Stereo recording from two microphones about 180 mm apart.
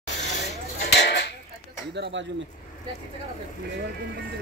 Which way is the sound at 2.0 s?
75° right (ahead or behind).